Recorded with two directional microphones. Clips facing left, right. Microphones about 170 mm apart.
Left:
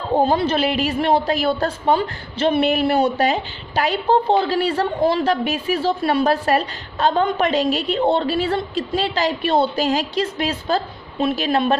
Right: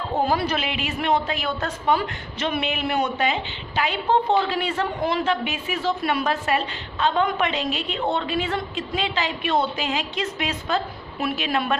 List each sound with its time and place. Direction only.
0.1 s a woman's voice: 25° left (ahead or behind)